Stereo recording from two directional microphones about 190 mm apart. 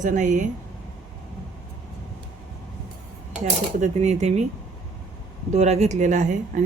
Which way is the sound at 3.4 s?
35° right (ahead or behind).